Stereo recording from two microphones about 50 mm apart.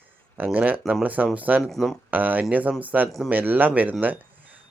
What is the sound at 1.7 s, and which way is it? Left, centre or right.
Speech, centre.